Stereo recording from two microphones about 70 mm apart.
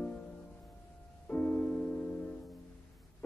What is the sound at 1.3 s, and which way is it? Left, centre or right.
Music, left.